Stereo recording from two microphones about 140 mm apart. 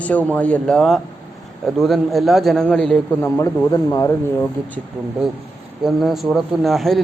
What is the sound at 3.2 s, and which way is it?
Speech, 15° left (ahead or behind).